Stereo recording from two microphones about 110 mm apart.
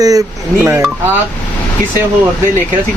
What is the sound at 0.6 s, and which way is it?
Speech, 20° right (ahead or behind).